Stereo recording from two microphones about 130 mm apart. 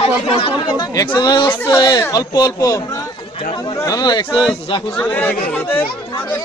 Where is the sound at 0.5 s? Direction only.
30° left (ahead or behind).